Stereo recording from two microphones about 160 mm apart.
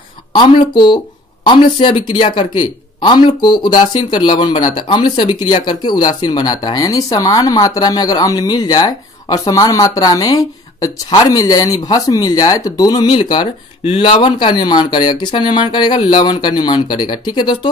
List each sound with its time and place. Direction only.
0.3 s speech: 30° left (ahead or behind)